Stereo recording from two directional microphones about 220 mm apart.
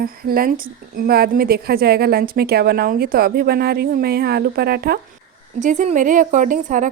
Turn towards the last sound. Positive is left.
turn(degrees=-35)  # may be behind; listen again after turning